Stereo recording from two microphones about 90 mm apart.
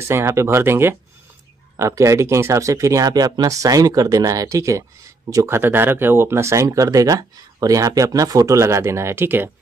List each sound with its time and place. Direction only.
0.1 s speech: 30° right (ahead or behind)
5.6 s speech: 25° right (ahead or behind)